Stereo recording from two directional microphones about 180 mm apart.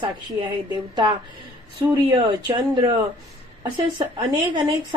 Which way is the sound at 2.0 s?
25° right (ahead or behind).